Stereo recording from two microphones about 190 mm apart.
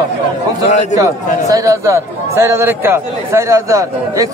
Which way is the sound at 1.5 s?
15° right (ahead or behind).